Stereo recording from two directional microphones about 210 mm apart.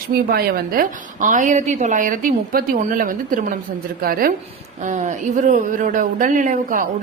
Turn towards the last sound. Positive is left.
turn(degrees=-40)  # may be behind; listen again after turning